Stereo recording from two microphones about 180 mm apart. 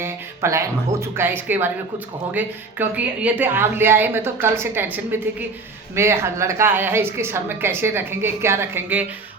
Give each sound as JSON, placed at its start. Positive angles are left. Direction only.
{"t": 0.0, "sound": "a woman's voice", "side_deg": -15}